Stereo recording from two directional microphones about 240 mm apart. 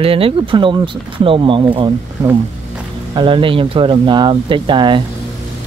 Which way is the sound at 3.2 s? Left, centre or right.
Right.